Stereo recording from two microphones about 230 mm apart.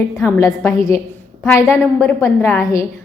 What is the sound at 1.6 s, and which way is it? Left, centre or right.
Speech, centre.